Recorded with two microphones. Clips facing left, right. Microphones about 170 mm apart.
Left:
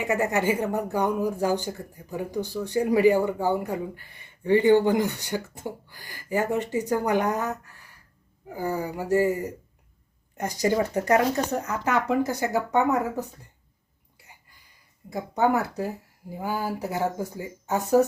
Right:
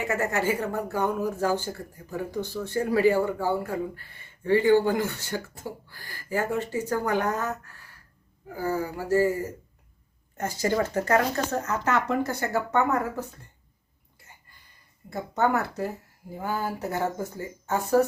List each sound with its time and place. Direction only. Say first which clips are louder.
0.0 s speech: left 2 dB; 15° left (ahead or behind)
15.1 s speech: left 2 dB; 15° left (ahead or behind)